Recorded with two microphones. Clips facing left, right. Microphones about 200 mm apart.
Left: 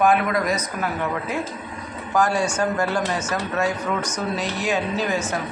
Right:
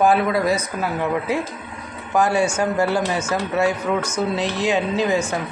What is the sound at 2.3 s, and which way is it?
Speech, 10° right (ahead or behind).